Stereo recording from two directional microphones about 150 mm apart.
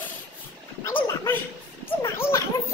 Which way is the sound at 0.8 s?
15° left (ahead or behind).